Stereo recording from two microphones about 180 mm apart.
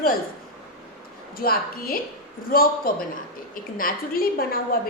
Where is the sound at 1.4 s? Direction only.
55° left (ahead or behind).